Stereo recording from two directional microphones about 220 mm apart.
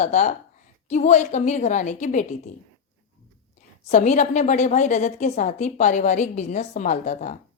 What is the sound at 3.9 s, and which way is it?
A woman's voice, 35° left (ahead or behind).